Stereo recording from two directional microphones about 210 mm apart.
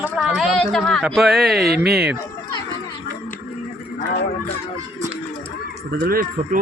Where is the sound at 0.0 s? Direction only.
Centre (ahead or behind).